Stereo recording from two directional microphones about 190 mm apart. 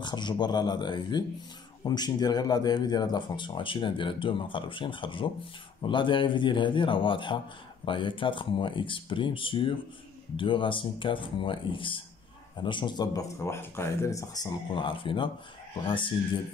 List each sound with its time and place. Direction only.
0.0 s speech: 25° left (ahead or behind)